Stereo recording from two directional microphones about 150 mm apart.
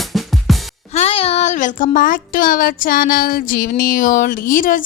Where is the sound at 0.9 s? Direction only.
40° left (ahead or behind).